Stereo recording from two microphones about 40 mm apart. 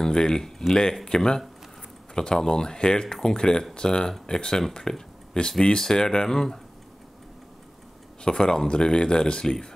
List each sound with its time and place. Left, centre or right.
0.0 s speech: centre
8.2 s speech: left